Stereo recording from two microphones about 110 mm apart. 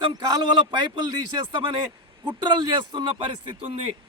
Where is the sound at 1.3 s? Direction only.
50° right (ahead or behind).